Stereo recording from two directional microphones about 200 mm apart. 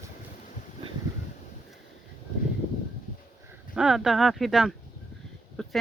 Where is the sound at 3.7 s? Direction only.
Centre (ahead or behind).